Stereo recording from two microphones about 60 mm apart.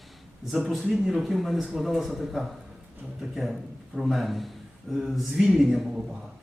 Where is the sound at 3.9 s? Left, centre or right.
Centre.